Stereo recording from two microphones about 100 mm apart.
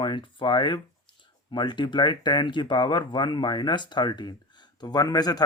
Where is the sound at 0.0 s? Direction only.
55° left (ahead or behind).